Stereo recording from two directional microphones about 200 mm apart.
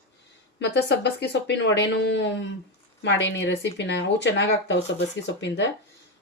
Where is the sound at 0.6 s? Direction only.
60° left (ahead or behind).